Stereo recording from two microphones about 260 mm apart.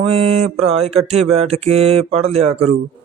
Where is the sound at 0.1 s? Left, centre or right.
Right.